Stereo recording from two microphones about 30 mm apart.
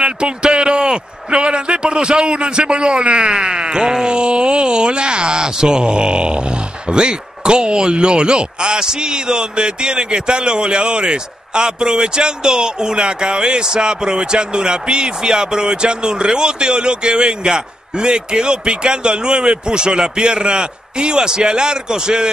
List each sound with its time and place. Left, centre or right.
0.0 s a man's voice: right